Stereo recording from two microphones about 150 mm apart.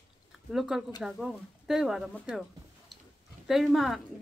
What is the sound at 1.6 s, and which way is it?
Speech, centre (ahead or behind).